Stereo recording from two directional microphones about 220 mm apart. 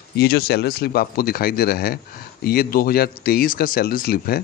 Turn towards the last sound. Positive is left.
turn(degrees=45)  # may be behind; listen again after turning